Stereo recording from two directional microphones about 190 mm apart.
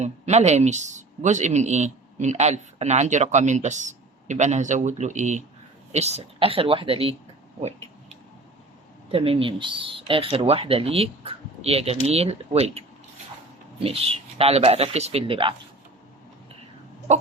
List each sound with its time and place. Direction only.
0.0 s a woman's voice: 35° right (ahead or behind)
9.1 s speech: 30° right (ahead or behind)